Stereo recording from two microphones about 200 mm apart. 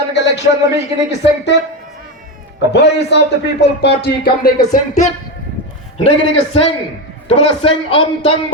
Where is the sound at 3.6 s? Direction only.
55° left (ahead or behind).